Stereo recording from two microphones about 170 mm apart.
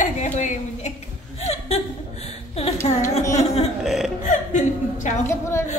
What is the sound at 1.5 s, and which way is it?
Chuckle, 35° left (ahead or behind).